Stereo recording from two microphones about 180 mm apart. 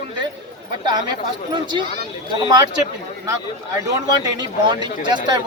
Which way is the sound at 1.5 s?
25° right (ahead or behind).